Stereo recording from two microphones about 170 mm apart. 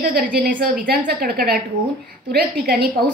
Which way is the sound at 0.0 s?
55° right (ahead or behind).